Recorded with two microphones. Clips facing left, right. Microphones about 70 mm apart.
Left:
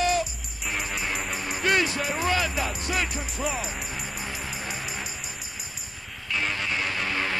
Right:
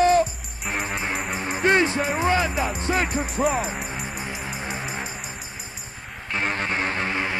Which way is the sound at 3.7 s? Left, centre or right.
Right.